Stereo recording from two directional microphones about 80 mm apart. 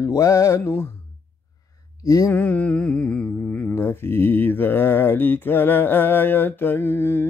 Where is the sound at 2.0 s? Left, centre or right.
Left.